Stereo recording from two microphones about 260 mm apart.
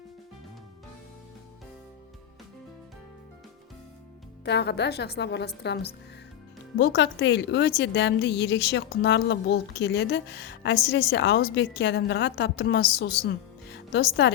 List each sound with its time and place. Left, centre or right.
4.4 s a woman's voice: left